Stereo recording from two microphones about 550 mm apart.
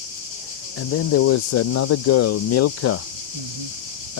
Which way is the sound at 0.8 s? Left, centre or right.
Left.